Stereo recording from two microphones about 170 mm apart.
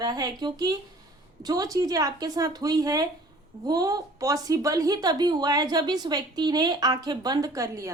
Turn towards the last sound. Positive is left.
turn(degrees=-20)  # may be behind; listen again after turning